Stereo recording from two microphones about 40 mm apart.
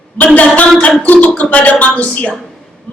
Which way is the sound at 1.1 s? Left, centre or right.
Left.